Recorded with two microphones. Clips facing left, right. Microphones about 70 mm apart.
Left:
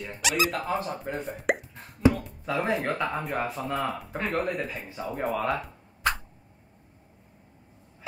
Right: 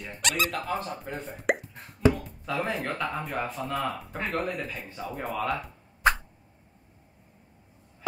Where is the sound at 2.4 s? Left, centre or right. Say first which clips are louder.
Left 4 dB; centre.